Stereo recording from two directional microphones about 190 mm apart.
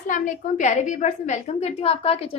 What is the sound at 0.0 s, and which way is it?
A woman's voice, 45° left (ahead or behind).